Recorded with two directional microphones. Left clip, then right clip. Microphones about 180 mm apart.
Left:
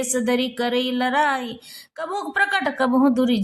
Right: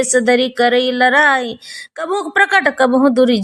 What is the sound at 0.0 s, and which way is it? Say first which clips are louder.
A woman's voice: right 9 dB; 20° right (ahead or behind).